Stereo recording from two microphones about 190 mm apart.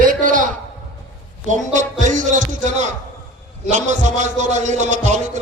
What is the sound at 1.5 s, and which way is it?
A man's voice, 40° right (ahead or behind).